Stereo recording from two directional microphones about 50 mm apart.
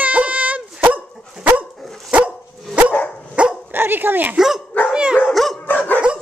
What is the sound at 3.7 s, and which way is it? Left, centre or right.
Dog, right.